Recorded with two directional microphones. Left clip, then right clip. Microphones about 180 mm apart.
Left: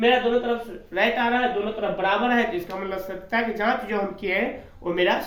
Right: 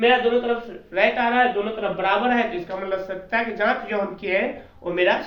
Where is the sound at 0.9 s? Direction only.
35° left (ahead or behind).